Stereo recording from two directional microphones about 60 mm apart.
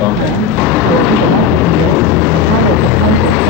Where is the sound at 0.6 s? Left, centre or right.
Left.